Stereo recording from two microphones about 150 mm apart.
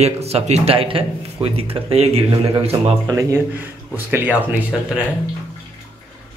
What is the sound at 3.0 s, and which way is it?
Speech, 20° right (ahead or behind).